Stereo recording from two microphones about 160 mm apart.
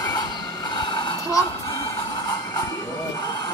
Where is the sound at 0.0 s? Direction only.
25° left (ahead or behind).